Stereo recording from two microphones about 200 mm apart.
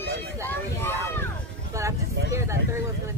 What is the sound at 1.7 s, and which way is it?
Speech, 15° right (ahead or behind).